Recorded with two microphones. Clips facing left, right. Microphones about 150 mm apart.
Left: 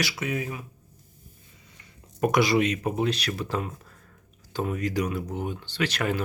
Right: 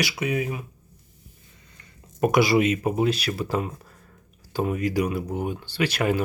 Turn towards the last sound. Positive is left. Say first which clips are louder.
# right 4 dB
turn(degrees=-10)  # may be behind; listen again after turning